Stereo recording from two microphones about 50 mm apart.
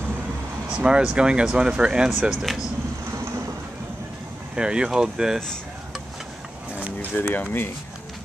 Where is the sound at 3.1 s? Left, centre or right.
Right.